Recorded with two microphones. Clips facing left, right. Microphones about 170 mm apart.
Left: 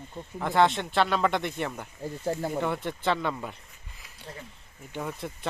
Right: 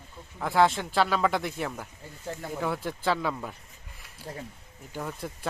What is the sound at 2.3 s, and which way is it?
Speech, 35° left (ahead or behind).